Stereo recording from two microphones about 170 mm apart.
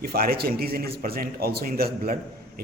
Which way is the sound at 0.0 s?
65° right (ahead or behind).